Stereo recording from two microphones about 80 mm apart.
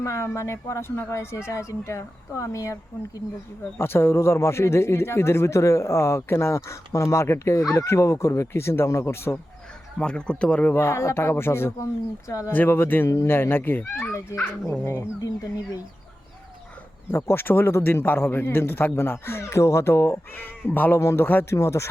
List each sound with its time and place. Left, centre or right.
0.0 s speech: left
3.8 s speech: left
10.0 s speech: centre
10.8 s a man's voice: left
14.3 s speech: left
17.1 s a man's voice: left
21.5 s speech: left